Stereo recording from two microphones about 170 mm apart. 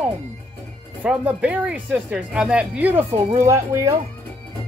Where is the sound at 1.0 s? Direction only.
10° right (ahead or behind).